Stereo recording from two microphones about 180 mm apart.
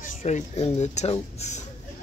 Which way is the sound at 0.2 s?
40° left (ahead or behind).